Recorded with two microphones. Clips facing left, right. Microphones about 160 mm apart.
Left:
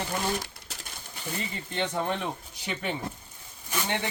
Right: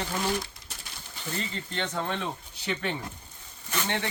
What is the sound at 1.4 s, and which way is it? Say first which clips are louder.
Speech: left 3 dB; 15° left (ahead or behind).